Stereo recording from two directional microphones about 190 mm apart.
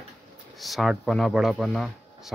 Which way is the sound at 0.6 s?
Centre (ahead or behind).